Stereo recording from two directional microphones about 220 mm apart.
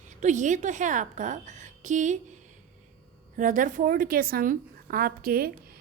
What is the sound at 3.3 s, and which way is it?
A woman's voice, 35° right (ahead or behind).